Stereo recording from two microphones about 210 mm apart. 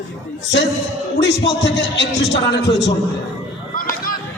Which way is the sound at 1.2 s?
55° left (ahead or behind).